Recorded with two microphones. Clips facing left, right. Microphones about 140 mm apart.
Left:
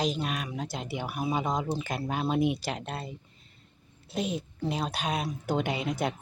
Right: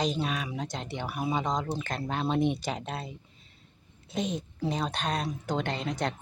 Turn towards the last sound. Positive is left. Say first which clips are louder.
# left 1 dB
turn(degrees=10)  # may be behind; listen again after turning